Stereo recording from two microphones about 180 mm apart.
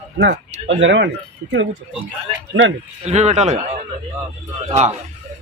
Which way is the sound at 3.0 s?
40° right (ahead or behind).